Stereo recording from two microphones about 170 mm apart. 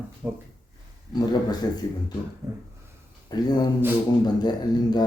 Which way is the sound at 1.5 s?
25° left (ahead or behind).